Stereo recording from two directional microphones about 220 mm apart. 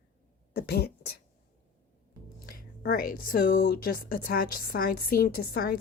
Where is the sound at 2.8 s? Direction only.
40° left (ahead or behind).